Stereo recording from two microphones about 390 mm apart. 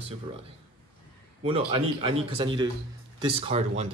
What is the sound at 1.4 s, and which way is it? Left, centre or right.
Speech, centre.